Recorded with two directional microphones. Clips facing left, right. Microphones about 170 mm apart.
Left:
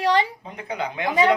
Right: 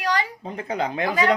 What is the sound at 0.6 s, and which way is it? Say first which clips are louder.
Speech: right 2 dB; 35° right (ahead or behind).